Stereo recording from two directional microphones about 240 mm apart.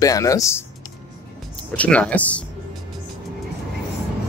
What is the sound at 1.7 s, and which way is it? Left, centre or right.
Speech, centre.